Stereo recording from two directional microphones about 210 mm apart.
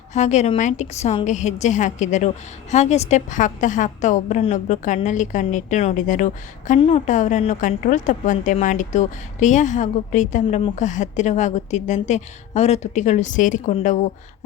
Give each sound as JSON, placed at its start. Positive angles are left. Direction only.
{"t": 0.1, "sound": "a woman's voice", "side_deg": 35}